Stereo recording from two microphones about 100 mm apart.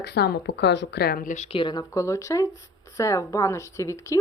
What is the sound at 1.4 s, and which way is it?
Speech, 60° left (ahead or behind).